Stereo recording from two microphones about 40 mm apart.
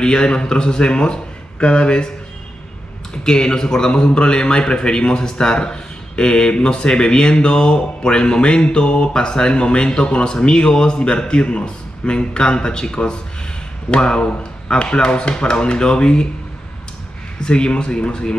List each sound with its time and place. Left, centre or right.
0.0 s a man's voice: left
3.3 s a man's voice: centre
17.4 s a man's voice: left